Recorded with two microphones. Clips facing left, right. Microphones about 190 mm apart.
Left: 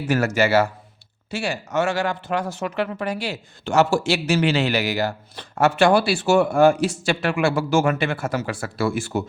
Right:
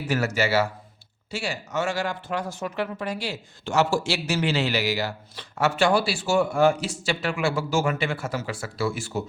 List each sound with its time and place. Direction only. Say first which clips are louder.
0.1 s speech: left 5 dB; 55° left (ahead or behind)